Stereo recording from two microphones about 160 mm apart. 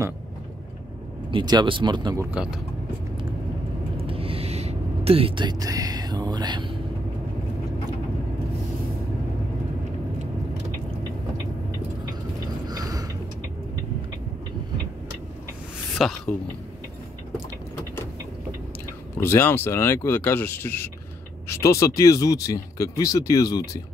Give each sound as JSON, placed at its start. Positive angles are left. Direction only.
{"t": 1.3, "sound": "speech", "side_deg": -25}
{"t": 2.3, "sound": "speech", "side_deg": -5}
{"t": 3.9, "sound": "a sound", "side_deg": -35}
{"t": 12.6, "sound": "a sound", "side_deg": -25}
{"t": 16.0, "sound": "a man's voice", "side_deg": 0}
{"t": 19.1, "sound": "speech", "side_deg": 15}